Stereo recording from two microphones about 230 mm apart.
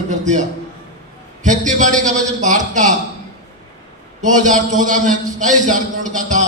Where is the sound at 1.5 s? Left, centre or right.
Right.